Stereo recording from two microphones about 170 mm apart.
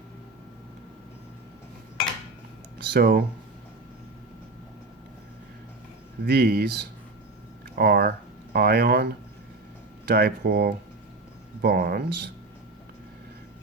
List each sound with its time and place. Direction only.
2.7 s speech: 80° right
6.2 s speech: 70° right (ahead or behind)
10.1 s speech: 70° right (ahead or behind)